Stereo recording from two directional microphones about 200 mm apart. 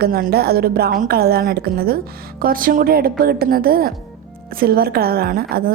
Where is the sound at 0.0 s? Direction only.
50° right (ahead or behind).